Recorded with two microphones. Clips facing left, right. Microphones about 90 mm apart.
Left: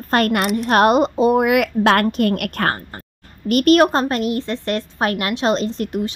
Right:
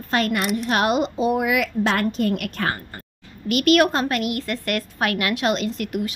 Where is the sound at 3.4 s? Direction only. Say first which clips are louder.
Left 4 dB; 40° left (ahead or behind).